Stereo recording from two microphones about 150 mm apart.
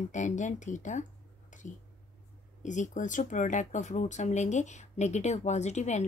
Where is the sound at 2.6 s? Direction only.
55° left (ahead or behind).